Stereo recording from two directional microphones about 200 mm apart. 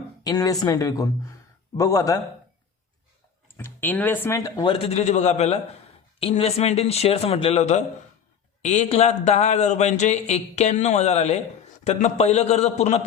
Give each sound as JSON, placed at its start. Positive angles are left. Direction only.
{"t": 0.3, "sound": "speech", "side_deg": 20}
{"t": 3.6, "sound": "speech", "side_deg": 10}